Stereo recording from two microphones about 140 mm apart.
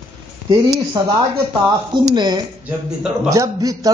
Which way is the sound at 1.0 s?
30° right (ahead or behind).